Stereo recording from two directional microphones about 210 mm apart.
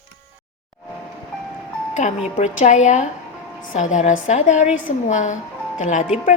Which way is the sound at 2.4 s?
35° left (ahead or behind).